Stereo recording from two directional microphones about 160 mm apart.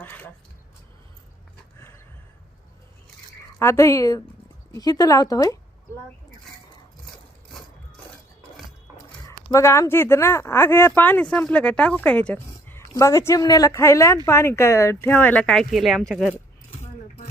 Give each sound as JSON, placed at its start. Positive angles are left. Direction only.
{"t": 0.0, "sound": "speech", "side_deg": 10}
{"t": 3.6, "sound": "speech", "side_deg": 15}
{"t": 9.2, "sound": "speech", "side_deg": 20}